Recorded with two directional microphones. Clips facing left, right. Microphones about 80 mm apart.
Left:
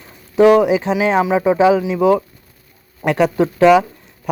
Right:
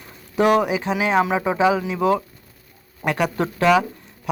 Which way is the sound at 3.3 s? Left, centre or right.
Centre.